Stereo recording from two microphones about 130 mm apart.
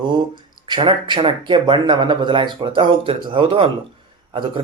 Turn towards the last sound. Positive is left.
turn(degrees=-40)  # may be behind; listen again after turning